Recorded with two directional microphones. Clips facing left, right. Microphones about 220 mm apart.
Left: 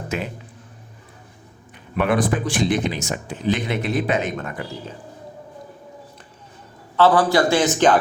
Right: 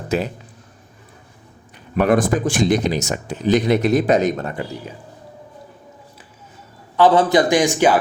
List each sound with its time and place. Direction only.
2.0 s speech: 45° right (ahead or behind)
6.9 s a man's voice: 20° right (ahead or behind)